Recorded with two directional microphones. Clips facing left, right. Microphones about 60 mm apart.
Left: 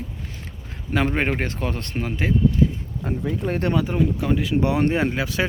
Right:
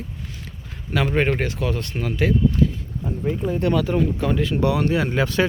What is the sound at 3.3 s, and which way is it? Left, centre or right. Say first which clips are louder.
Speech: right 4 dB; left.